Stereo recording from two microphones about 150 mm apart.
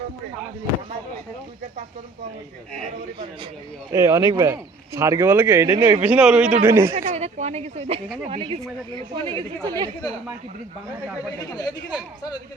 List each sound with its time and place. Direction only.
3.9 s speech: 20° right (ahead or behind)
6.0 s a man's voice: 10° right (ahead or behind)
6.9 s speech: 50° right (ahead or behind); by 9.9 s 25° right (ahead or behind)
11.3 s speech: 25° left (ahead or behind)